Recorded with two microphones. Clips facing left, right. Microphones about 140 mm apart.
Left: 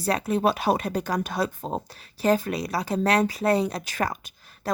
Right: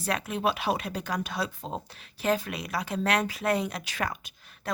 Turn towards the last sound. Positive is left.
turn(degrees=40)  # may be behind; listen again after turning